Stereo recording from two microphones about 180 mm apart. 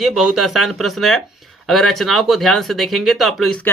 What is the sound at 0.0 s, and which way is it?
Speech, 5° right (ahead or behind).